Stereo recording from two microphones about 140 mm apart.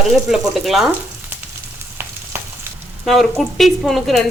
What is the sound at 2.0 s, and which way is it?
Frying, 15° right (ahead or behind).